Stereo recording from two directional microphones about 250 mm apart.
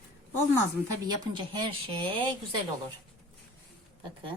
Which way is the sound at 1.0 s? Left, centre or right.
Centre.